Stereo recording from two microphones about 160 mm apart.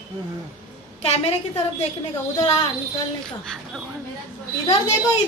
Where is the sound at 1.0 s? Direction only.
40° left (ahead or behind).